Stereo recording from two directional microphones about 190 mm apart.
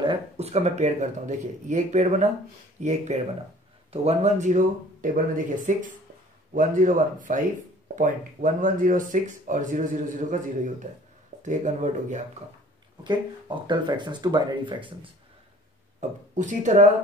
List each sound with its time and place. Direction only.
0.0 s speech: 30° right (ahead or behind)
13.0 s speech: 25° right (ahead or behind)
16.0 s speech: 40° right (ahead or behind)